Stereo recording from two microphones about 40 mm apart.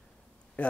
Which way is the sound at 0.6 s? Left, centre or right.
Left.